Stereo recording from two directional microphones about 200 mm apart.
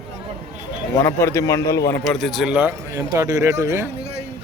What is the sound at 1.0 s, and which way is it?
Speech, 15° left (ahead or behind).